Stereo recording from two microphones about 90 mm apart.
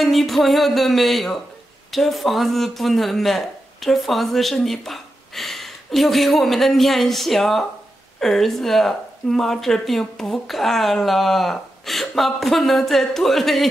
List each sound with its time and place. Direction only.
0.0 s speech: centre (ahead or behind)